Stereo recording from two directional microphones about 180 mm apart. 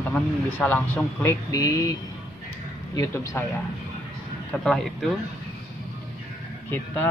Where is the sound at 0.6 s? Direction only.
10° left (ahead or behind).